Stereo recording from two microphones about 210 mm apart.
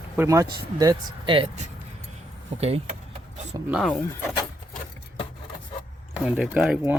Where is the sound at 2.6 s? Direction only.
30° right (ahead or behind).